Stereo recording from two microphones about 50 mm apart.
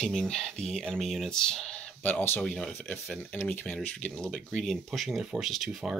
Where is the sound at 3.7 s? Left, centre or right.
Left.